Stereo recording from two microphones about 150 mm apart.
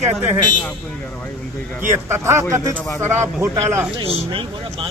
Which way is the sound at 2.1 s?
20° right (ahead or behind).